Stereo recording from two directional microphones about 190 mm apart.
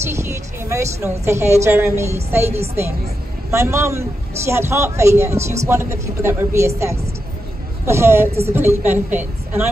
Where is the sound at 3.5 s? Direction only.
15° right (ahead or behind).